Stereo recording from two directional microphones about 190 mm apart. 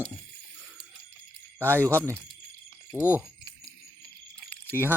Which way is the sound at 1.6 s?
10° right (ahead or behind).